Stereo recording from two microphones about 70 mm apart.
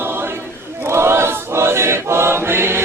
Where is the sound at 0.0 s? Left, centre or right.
Right.